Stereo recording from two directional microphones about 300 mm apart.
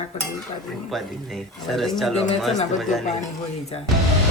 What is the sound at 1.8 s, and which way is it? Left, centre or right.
Speech, centre.